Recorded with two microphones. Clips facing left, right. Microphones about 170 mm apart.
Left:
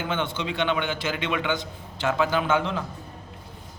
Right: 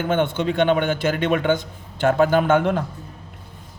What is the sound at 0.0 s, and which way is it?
A man's voice, 50° right (ahead or behind).